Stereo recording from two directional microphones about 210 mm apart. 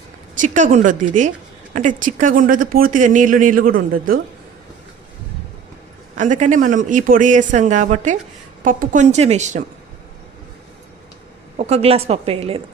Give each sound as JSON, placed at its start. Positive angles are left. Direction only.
{"t": 0.3, "sound": "speech", "side_deg": -35}
{"t": 6.1, "sound": "speech", "side_deg": -35}
{"t": 11.5, "sound": "a woman's voice", "side_deg": -30}